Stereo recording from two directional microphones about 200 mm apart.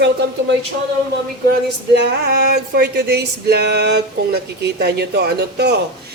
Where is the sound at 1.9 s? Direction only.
55° right (ahead or behind).